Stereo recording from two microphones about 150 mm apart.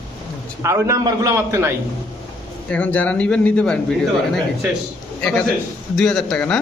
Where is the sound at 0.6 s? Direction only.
20° right (ahead or behind).